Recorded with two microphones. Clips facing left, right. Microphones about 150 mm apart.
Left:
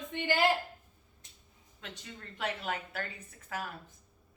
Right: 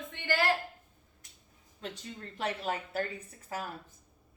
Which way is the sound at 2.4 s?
35° right (ahead or behind).